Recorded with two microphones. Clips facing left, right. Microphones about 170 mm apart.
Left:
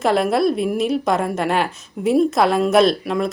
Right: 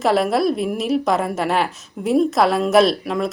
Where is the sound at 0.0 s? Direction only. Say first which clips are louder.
Even; centre (ahead or behind).